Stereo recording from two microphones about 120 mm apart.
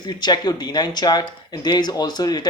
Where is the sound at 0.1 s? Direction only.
35° left (ahead or behind).